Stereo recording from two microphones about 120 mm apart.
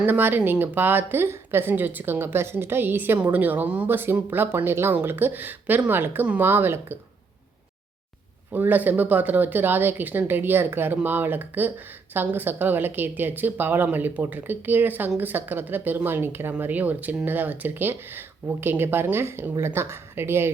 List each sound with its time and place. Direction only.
0.0 s a woman's voice: 15° right (ahead or behind)
8.5 s a woman's voice: 15° right (ahead or behind)